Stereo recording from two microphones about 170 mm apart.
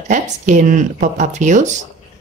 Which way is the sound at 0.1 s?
50° right (ahead or behind).